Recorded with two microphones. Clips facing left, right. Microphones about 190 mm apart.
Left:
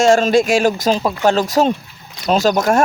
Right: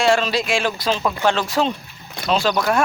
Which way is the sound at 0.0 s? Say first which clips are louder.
Left 6 dB; 45° left (ahead or behind).